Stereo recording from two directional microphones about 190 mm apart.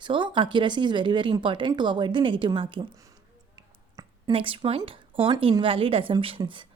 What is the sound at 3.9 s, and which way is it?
Speech, 25° right (ahead or behind).